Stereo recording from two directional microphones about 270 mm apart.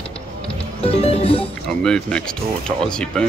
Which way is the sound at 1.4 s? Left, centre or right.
Centre.